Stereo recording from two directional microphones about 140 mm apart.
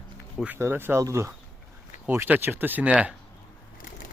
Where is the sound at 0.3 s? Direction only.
10° right (ahead or behind).